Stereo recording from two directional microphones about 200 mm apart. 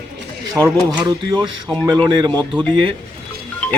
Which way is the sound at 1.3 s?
20° right (ahead or behind).